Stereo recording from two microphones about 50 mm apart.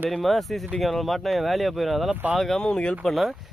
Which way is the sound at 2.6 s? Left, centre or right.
Centre.